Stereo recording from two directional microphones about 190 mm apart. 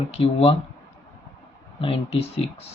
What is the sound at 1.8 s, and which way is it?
Speech, 30° left (ahead or behind).